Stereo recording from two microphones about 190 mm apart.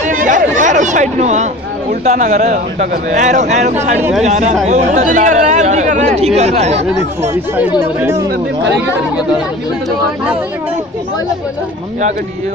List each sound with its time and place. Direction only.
0.1 s speech: 45° right (ahead or behind)